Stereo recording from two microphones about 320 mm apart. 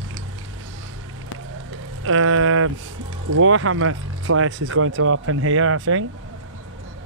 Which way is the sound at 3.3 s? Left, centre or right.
Right.